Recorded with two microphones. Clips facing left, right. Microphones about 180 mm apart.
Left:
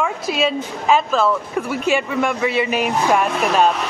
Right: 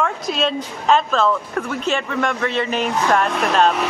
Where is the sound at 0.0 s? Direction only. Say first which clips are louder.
Left 1 dB; 5° left (ahead or behind).